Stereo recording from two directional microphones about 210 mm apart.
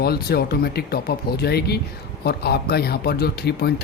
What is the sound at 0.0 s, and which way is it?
A man's voice, 50° left (ahead or behind).